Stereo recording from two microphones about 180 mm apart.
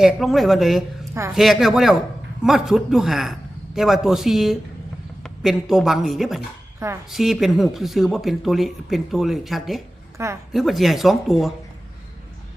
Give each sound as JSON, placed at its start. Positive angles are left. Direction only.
{"t": 0.0, "sound": "speech", "side_deg": 0}
{"t": 6.7, "sound": "speech", "side_deg": -15}
{"t": 7.1, "sound": "speech", "side_deg": 0}
{"t": 10.2, "sound": "a woman's voice", "side_deg": -15}
{"t": 10.5, "sound": "speech", "side_deg": 0}